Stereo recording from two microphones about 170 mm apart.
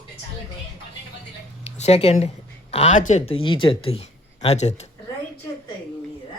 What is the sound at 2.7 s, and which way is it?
Speech, 45° left (ahead or behind).